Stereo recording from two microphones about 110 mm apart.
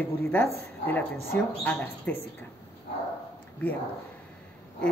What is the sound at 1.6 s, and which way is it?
Speech, 15° left (ahead or behind).